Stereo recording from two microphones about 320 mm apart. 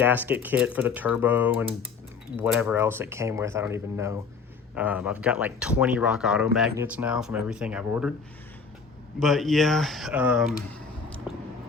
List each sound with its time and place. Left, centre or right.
0.0 s speech: centre
9.1 s speech: centre